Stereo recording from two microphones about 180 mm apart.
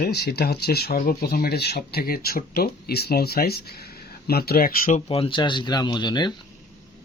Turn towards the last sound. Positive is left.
turn(degrees=25)  # may be behind; listen again after turning